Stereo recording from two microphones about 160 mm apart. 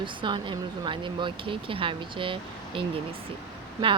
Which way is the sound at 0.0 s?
30° right (ahead or behind).